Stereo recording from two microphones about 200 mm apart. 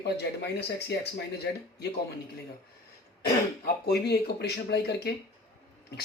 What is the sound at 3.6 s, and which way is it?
Speech, 55° left (ahead or behind).